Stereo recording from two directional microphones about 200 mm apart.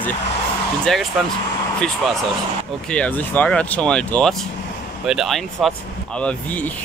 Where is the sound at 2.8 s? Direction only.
5° left (ahead or behind).